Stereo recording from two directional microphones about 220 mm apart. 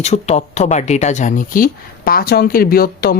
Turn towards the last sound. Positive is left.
turn(degrees=45)  # may be behind; listen again after turning